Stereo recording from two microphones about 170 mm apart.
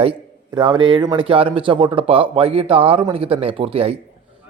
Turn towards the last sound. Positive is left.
turn(degrees=-35)  # may be behind; listen again after turning